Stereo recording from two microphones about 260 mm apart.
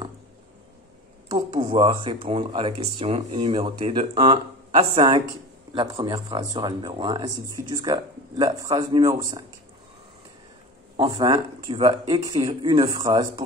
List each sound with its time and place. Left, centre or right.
1.3 s speech: centre
11.0 s speech: centre